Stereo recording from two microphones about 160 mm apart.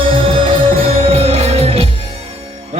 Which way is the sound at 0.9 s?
40° right (ahead or behind).